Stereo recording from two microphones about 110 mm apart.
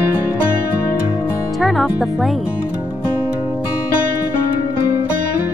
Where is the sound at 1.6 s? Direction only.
Centre (ahead or behind).